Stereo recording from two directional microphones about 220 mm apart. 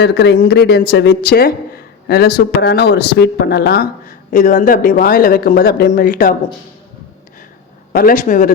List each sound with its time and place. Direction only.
0.0 s speech: 50° left (ahead or behind)
7.9 s a man's voice: 35° left (ahead or behind)